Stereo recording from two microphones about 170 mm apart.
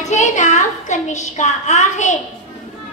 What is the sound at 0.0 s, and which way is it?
A woman's voice, 45° left (ahead or behind).